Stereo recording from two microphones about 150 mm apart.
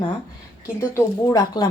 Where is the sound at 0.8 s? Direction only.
20° left (ahead or behind).